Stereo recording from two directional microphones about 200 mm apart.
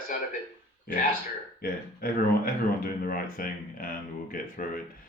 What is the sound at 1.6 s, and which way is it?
Speech, 50° left (ahead or behind).